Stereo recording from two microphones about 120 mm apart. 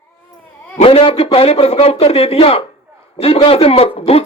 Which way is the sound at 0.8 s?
55° left (ahead or behind).